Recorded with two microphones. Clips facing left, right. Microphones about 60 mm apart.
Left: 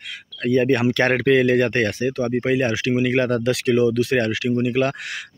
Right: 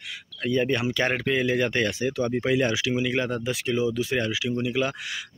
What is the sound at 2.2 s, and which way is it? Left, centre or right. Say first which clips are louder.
Speech: left 3 dB; left.